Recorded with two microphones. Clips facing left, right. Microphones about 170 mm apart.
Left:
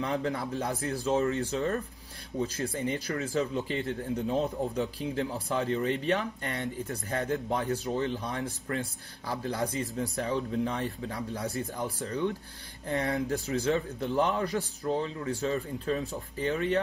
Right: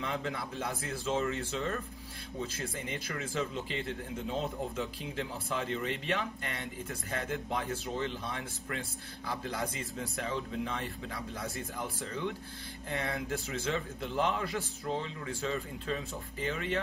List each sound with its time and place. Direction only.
0.0 s speech: 40° left (ahead or behind)